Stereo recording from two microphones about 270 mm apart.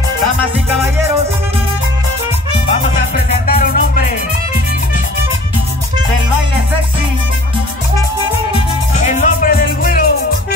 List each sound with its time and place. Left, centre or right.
3.4 s music: left
8.5 s music: left